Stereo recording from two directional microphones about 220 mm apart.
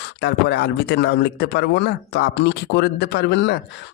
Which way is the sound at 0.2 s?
50° left (ahead or behind).